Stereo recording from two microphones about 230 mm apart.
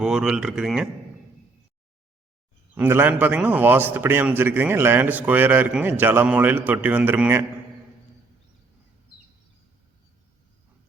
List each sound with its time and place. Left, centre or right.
0.0 s speech: centre
2.7 s a man's voice: centre